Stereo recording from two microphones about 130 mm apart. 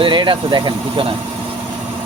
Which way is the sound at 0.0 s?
40° right (ahead or behind).